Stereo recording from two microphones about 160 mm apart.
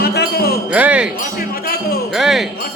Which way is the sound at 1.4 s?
70° left (ahead or behind).